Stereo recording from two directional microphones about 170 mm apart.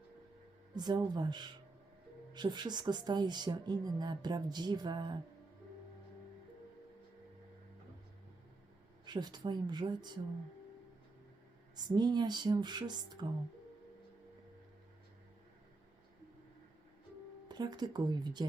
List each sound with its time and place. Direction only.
0.8 s speech: 25° right (ahead or behind)
9.0 s speech: 25° right (ahead or behind)
11.8 s speech: 25° right (ahead or behind)
17.5 s speech: 25° right (ahead or behind)